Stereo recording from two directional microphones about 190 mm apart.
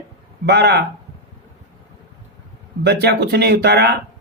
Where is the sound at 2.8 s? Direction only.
55° right (ahead or behind).